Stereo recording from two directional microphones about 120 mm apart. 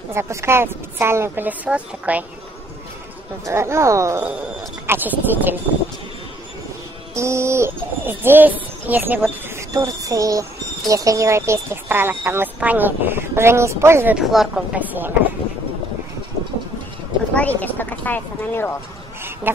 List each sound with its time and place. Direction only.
0.1 s speech: 25° right (ahead or behind)
3.4 s speech: 25° right (ahead or behind)
7.2 s speech: 25° right (ahead or behind)
9.6 s speech: 30° right (ahead or behind)
14.1 s speech: 5° right (ahead or behind)
17.3 s speech: 10° left (ahead or behind)
19.5 s a sound: 15° right (ahead or behind)